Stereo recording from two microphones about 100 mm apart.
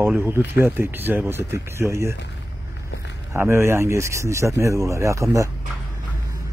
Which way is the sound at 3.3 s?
25° right (ahead or behind).